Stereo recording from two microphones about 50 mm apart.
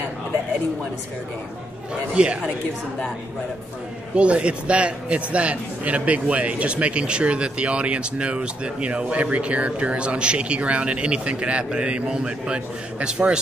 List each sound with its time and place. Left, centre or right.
2.2 s a man's voice: right
4.1 s a man's voice: right